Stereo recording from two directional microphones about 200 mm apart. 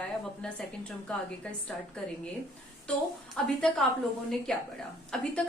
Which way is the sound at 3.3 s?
5° left (ahead or behind).